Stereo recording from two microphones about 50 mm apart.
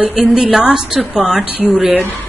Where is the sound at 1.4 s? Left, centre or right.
Right.